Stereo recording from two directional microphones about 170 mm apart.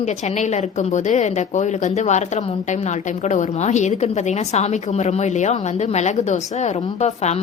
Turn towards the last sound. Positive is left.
turn(degrees=40)  # may be behind; listen again after turning